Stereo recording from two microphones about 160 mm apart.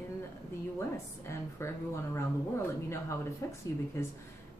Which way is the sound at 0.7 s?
15° left (ahead or behind).